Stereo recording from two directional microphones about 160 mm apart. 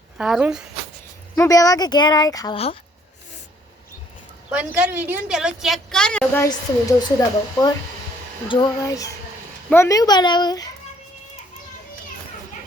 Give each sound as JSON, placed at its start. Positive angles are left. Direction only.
{"t": 0.2, "sound": "a woman's voice", "side_deg": -5}
{"t": 1.4, "sound": "speech", "side_deg": 20}
{"t": 4.4, "sound": "a woman's voice", "side_deg": -5}
{"t": 6.4, "sound": "speech", "side_deg": 20}